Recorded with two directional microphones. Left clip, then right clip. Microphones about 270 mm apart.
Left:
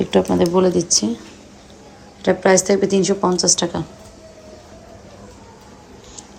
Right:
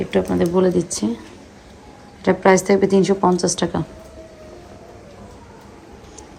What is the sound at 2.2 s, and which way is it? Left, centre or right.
A woman's voice, centre.